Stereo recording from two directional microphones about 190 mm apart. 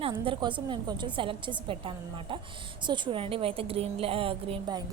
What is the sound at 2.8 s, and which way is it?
A woman's voice, 25° right (ahead or behind).